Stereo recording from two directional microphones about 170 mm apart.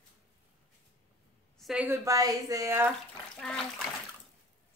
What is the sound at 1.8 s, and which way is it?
A woman's voice, 20° right (ahead or behind).